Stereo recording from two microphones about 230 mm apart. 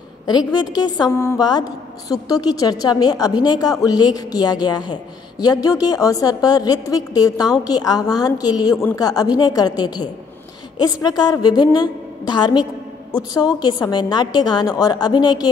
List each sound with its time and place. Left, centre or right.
0.3 s a woman's voice: centre